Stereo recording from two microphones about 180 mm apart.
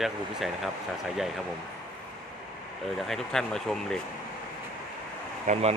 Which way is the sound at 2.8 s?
Centre (ahead or behind).